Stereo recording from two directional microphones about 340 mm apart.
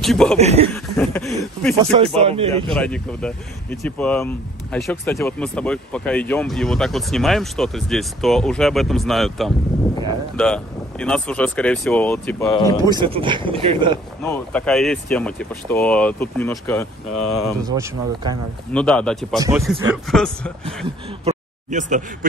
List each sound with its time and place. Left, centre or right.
0.0 s speech: centre
0.4 s speech: centre
0.7 s speech: centre
2.1 s speech: centre
2.7 s speech: centre
12.8 s speech: centre
14.2 s speech: centre
17.6 s speech: centre
18.7 s speech: centre
19.3 s speech: centre
19.6 s speech: centre
20.6 s speech: centre